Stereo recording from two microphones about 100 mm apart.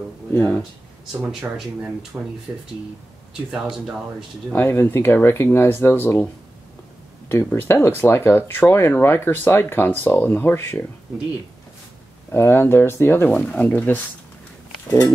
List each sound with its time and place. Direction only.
0.3 s speech: 20° left (ahead or behind)
1.3 s speech: 10° right (ahead or behind)
4.6 s speech: 25° left (ahead or behind)
12.3 s speech: 20° left (ahead or behind)
14.9 s speech: 35° left (ahead or behind)